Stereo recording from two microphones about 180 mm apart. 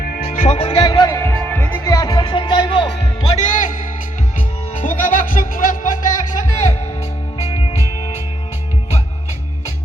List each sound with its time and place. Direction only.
0.3 s music: 40° left (ahead or behind); by 2.0 s 15° left (ahead or behind)
2.0 s music: 30° left (ahead or behind)
3.3 s music: 45° left (ahead or behind)
4.8 s music: 45° left (ahead or behind)